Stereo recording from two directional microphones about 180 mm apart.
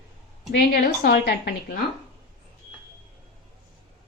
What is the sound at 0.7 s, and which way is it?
A woman's voice, 60° left (ahead or behind).